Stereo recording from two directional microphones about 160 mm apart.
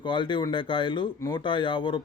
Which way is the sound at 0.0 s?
30° left (ahead or behind).